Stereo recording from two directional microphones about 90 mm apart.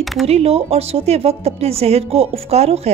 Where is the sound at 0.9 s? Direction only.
90° right.